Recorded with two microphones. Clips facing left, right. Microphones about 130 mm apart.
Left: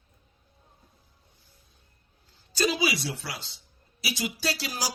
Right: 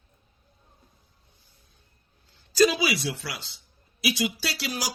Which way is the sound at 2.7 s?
35° left (ahead or behind).